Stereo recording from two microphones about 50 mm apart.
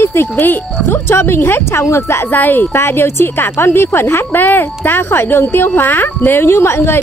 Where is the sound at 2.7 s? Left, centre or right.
Left.